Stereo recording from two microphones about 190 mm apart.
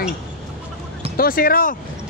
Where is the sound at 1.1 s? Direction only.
50° left (ahead or behind).